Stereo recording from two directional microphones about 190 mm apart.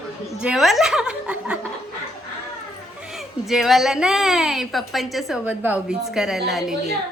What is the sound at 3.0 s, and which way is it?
A woman's voice, centre (ahead or behind).